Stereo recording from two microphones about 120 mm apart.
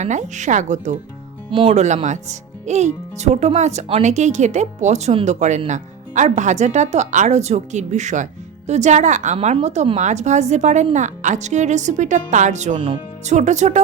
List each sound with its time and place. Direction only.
0.0 s speech: 90° right
1.5 s speech: 45° right (ahead or behind)
1.7 s a woman's voice: 75° right (ahead or behind)
12.7 s speech: 45° right (ahead or behind)
13.2 s speech: 75° right (ahead or behind)